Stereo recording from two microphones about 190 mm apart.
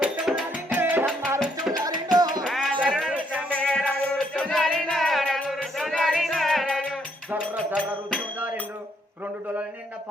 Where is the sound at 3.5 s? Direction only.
5° left (ahead or behind).